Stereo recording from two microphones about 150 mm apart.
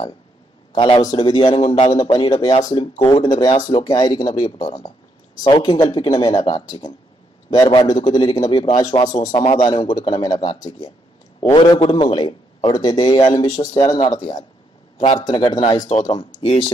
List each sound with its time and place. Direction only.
0.7 s a man's voice: 35° left (ahead or behind)
9.5 s a man's voice: 35° left (ahead or behind)
11.5 s a man's voice: 30° left (ahead or behind)
15.9 s a man's voice: 40° left (ahead or behind)